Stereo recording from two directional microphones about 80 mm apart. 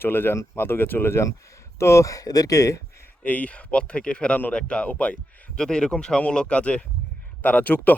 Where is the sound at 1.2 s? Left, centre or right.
Left.